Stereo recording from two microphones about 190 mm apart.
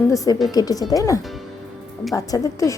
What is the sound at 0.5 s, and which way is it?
A woman's voice, 20° left (ahead or behind).